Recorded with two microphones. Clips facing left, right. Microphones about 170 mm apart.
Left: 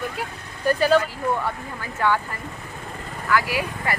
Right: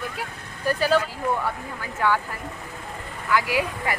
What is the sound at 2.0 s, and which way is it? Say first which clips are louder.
Speech: left 1 dB; 10° right (ahead or behind).